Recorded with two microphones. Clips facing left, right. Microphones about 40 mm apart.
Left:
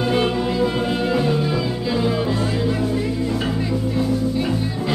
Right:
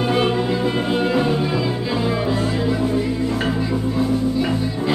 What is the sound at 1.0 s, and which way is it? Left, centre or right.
Music, centre.